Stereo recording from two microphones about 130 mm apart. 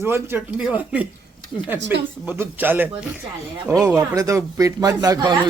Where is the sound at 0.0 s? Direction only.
20° right (ahead or behind).